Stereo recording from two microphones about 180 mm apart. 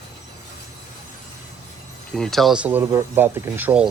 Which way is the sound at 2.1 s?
Centre (ahead or behind).